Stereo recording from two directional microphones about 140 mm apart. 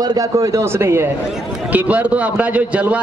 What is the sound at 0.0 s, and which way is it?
A man's voice, 25° right (ahead or behind).